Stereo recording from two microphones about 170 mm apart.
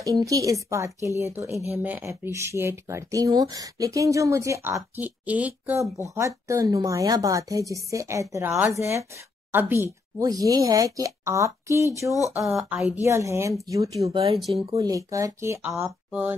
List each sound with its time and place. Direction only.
0.0 s a woman's voice: 20° right (ahead or behind)
12.4 s speech: centre (ahead or behind)
13.0 s speech: 15° right (ahead or behind)
14.1 s speech: 35° right (ahead or behind)
14.8 s a woman's voice: 20° right (ahead or behind)